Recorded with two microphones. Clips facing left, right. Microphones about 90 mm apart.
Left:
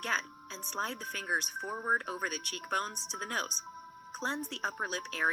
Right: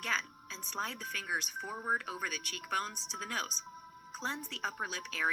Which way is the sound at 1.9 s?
35° left (ahead or behind).